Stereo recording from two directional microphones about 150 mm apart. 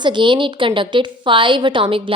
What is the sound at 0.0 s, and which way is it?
A woman's voice, 30° right (ahead or behind).